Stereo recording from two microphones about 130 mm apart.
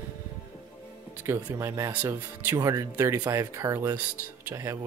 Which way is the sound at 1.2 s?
20° right (ahead or behind).